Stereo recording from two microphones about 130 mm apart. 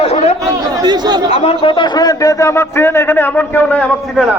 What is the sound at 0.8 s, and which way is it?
Speech, 30° right (ahead or behind).